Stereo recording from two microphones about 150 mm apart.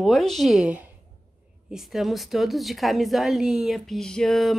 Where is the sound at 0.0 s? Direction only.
Centre (ahead or behind).